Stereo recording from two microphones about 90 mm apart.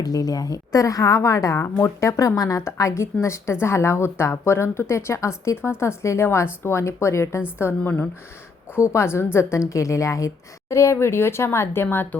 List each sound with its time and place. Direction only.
0.0 s speech: 45° left (ahead or behind); by 12.0 s 25° left (ahead or behind)